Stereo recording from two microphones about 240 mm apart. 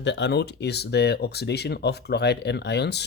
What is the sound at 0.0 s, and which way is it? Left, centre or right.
Speech, left.